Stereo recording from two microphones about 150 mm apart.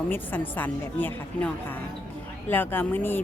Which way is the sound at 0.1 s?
10° left (ahead or behind).